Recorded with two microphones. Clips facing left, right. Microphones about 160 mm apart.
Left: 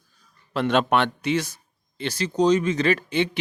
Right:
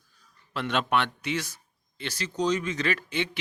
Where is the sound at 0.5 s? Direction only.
35° left (ahead or behind).